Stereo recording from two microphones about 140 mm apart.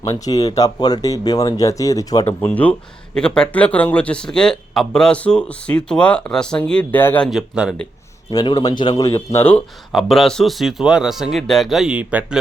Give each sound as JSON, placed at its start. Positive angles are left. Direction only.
{"t": 0.0, "sound": "speech", "side_deg": 25}
{"t": 2.2, "sound": "speech", "side_deg": 10}
{"t": 7.3, "sound": "speech", "side_deg": -5}
{"t": 8.3, "sound": "speech", "side_deg": 30}
{"t": 9.9, "sound": "speech", "side_deg": 0}